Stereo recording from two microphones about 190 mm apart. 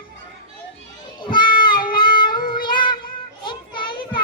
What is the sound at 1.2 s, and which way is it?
Child singing, 25° left (ahead or behind).